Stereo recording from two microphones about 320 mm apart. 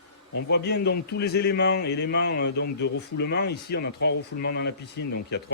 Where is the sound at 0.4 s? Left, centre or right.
Left.